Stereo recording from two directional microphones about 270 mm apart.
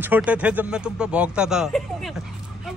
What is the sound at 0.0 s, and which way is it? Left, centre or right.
Speech, centre.